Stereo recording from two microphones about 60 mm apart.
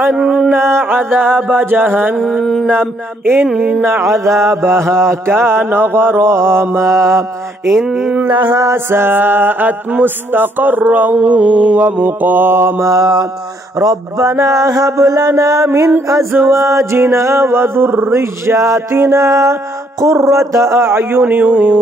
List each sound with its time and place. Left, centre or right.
0.1 s a sound: centre
0.5 s music: right
2.1 s mantra: centre
2.7 s music: right
3.4 s a sound: centre
3.8 s mantra: right
7.7 s a sound: centre
8.2 s music: right
11.1 s mantra: right
12.9 s mantra: right
14.4 s mantra: right
16.3 s mantra: right
19.2 s a sound: right
21.0 s mantra: right